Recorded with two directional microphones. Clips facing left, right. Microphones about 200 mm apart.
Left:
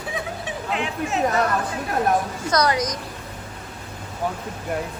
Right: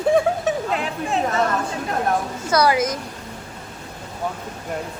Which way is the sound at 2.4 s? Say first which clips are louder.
Right 4 dB; 5° right (ahead or behind).